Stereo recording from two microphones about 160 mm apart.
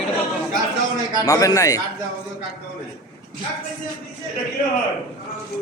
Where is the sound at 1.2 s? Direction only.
20° left (ahead or behind).